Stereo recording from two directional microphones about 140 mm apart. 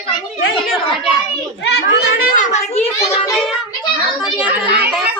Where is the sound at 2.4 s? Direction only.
55° left (ahead or behind).